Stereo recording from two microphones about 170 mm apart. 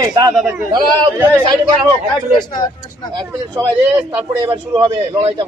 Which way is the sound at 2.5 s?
25° left (ahead or behind).